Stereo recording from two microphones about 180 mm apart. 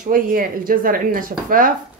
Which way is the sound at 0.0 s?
50° right (ahead or behind).